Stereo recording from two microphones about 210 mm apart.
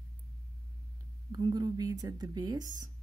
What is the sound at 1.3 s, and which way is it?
Speech, 20° right (ahead or behind).